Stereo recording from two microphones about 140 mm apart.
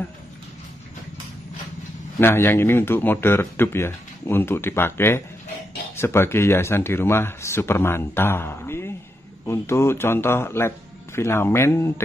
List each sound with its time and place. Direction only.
2.1 s speech: 15° left (ahead or behind)